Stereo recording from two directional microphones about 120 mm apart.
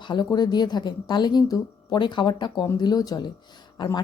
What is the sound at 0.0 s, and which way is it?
Speech, 40° left (ahead or behind).